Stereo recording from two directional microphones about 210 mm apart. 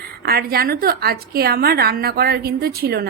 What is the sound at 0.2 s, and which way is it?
A woman's voice, 50° right (ahead or behind).